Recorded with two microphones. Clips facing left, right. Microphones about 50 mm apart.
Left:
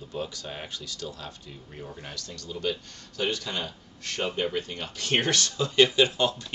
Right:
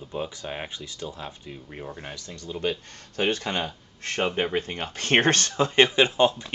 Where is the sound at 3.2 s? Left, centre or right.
Right.